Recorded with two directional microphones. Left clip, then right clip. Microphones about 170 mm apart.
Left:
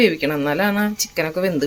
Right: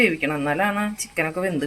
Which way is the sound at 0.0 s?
25° left (ahead or behind).